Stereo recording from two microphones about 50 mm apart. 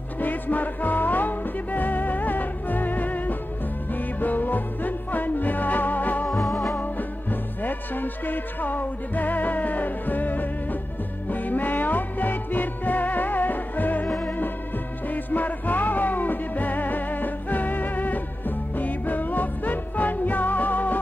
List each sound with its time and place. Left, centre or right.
0.2 s music: left
6.2 s music: centre
6.8 s music: left